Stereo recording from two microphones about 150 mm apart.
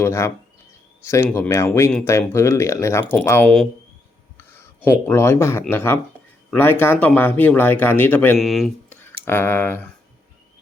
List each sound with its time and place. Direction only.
0.0 s speech: 15° left (ahead or behind)
4.4 s speech: 15° left (ahead or behind)
8.4 s speech: centre (ahead or behind)
8.9 s a sound: 15° left (ahead or behind)